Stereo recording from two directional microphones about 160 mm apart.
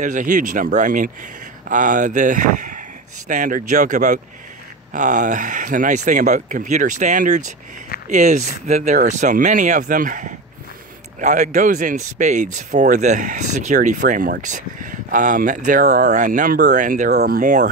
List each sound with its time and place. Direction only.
0.0 s speech: 55° right (ahead or behind); by 16.1 s 75° right (ahead or behind)
16.1 s speech: 55° right (ahead or behind)
17.1 s speech: 80° right; by 17.6 s 55° right (ahead or behind)